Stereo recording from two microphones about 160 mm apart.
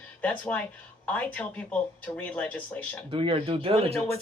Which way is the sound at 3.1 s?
35° right (ahead or behind).